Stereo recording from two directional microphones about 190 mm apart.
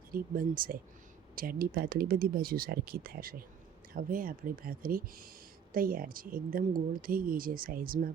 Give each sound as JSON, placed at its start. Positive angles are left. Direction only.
{"t": 0.1, "sound": "speech", "side_deg": -50}